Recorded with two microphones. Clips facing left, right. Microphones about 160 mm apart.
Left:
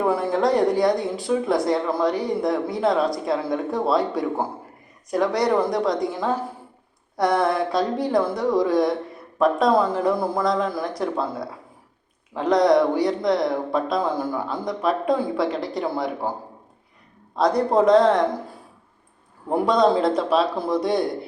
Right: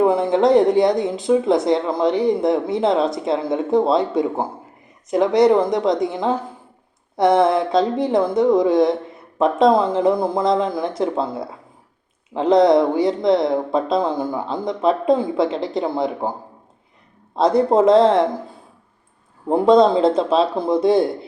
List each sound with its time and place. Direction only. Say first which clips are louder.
0.0 s speech: right 5 dB; 20° right (ahead or behind)
17.3 s speech: right 4 dB; 25° right (ahead or behind)
19.5 s speech: right 5 dB; 25° right (ahead or behind)